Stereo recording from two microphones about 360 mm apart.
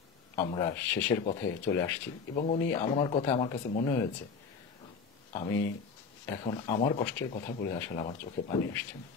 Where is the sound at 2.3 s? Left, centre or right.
Centre.